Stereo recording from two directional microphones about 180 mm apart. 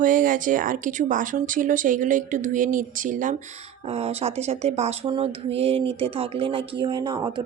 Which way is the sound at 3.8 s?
35° right (ahead or behind).